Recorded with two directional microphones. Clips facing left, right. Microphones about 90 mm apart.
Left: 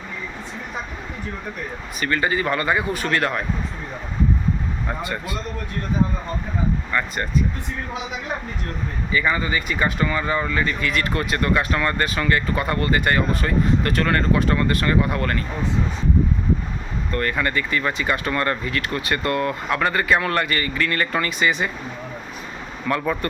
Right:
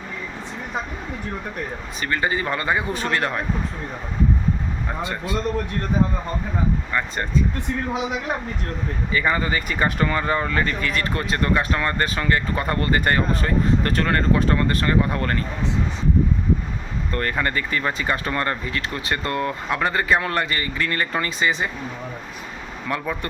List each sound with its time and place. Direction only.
2.0 s speech: 25° right (ahead or behind)
5.0 s speech: 25° right (ahead or behind)
9.1 s speech: 40° right (ahead or behind)
17.1 s speech: 35° right (ahead or behind)
22.9 s speech: 15° right (ahead or behind)